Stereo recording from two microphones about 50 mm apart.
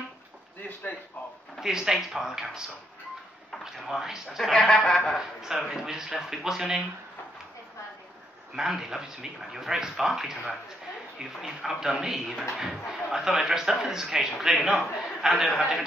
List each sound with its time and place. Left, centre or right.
0.6 s a sound: left
1.6 s speech: centre
3.8 s speech: centre
4.4 s speech: centre
5.4 s speech: centre
8.5 s speech: centre